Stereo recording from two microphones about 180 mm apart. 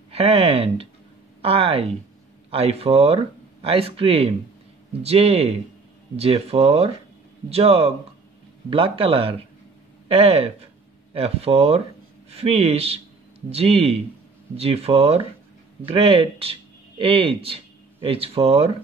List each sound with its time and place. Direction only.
0.1 s a man's voice: 35° right (ahead or behind)